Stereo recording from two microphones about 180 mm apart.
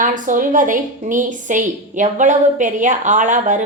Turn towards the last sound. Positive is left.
turn(degrees=-45)  # may be behind; listen again after turning